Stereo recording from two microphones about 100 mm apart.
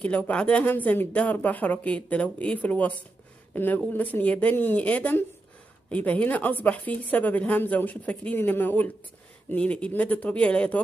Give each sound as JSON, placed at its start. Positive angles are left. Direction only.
{"t": 0.0, "sound": "speech", "side_deg": 15}